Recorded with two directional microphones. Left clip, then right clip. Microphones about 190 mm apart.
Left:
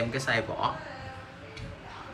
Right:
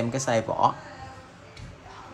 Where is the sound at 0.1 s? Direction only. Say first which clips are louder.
Right 3 dB; 35° right (ahead or behind).